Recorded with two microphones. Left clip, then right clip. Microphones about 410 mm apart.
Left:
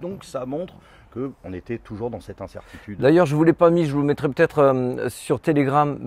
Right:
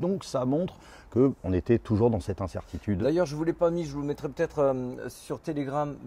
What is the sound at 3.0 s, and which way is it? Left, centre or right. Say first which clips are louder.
Speech: left 11 dB; left.